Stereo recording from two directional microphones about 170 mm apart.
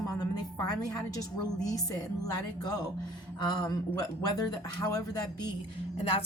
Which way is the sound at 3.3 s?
25° left (ahead or behind).